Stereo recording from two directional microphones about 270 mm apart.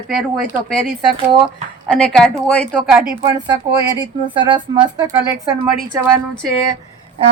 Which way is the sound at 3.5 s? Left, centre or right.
Centre.